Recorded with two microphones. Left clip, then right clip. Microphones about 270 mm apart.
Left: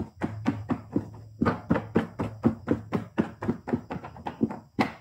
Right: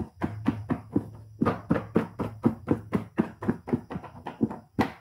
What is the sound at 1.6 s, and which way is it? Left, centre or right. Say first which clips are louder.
Music: even; centre.